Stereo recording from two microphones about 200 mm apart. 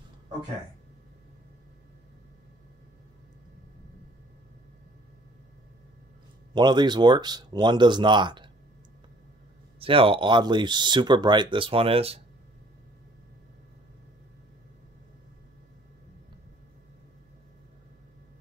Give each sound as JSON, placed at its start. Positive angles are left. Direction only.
{"t": 6.5, "sound": "speech", "side_deg": -20}
{"t": 9.8, "sound": "speech", "side_deg": -25}